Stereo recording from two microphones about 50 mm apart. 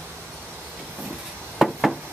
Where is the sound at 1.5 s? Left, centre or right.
Centre.